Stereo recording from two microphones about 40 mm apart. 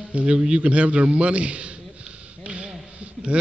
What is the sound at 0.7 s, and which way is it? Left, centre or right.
A man's voice, right.